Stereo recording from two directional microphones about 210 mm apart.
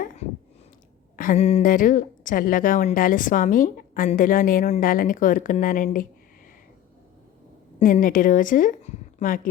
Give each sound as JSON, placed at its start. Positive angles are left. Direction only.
{"t": 1.1, "sound": "speech", "side_deg": 40}
{"t": 7.8, "sound": "a woman's voice", "side_deg": 40}